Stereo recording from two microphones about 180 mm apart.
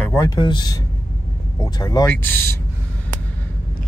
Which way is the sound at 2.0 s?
10° left (ahead or behind).